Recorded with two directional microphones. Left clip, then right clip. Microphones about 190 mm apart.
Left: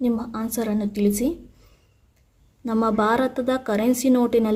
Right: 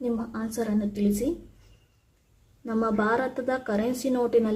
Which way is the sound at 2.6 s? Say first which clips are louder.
Left 5 dB; 30° left (ahead or behind).